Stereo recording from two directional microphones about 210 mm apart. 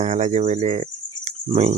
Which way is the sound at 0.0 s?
35° right (ahead or behind).